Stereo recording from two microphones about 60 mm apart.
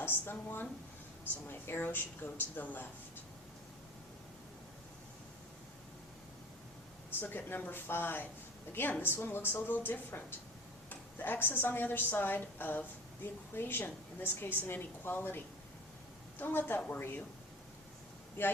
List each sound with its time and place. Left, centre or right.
0.0 s a woman's voice: left
7.2 s a woman's voice: left
16.4 s a woman's voice: left